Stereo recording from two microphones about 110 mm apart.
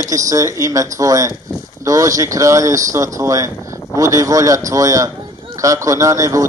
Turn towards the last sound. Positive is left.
turn(degrees=-30)  # may be behind; listen again after turning